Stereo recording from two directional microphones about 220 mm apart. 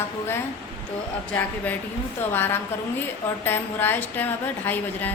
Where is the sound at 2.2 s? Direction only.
10° left (ahead or behind).